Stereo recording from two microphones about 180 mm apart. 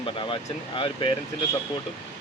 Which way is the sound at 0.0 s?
30° left (ahead or behind).